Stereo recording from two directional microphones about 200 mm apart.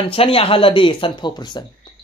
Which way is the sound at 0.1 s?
30° left (ahead or behind).